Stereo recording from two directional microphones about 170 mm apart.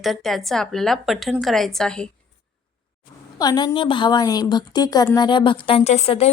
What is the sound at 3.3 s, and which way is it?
A woman's voice, 25° left (ahead or behind).